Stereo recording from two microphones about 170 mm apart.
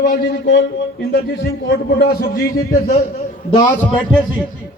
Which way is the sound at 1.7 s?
70° left (ahead or behind).